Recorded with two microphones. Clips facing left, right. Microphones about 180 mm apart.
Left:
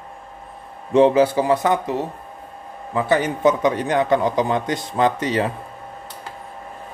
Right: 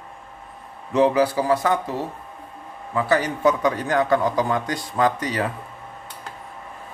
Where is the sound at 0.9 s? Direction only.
25° left (ahead or behind).